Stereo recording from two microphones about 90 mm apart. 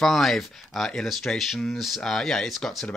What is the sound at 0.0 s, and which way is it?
Speech, centre (ahead or behind).